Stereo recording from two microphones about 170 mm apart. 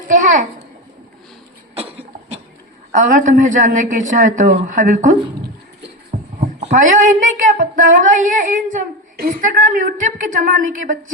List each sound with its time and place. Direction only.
0.1 s speech: 50° right (ahead or behind)
1.7 s cough: 35° right (ahead or behind)
2.9 s speech: 45° right (ahead or behind)